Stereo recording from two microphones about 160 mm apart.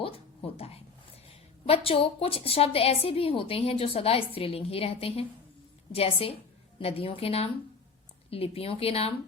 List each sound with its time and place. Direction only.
0.0 s a woman's voice: 35° left (ahead or behind)